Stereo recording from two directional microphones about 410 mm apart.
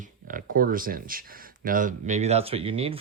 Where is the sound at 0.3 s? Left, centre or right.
Right.